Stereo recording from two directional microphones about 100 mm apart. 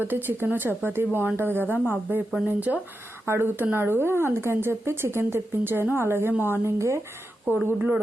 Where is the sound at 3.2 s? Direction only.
25° right (ahead or behind).